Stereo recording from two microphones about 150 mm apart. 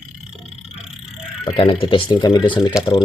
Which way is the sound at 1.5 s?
35° left (ahead or behind).